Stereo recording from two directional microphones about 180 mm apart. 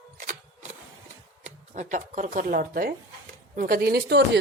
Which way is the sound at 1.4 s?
40° right (ahead or behind).